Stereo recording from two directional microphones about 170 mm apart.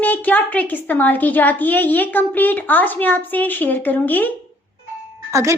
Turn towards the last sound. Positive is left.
turn(degrees=-15)  # may be behind; listen again after turning